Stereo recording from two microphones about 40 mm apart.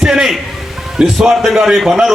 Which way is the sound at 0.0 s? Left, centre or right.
Centre.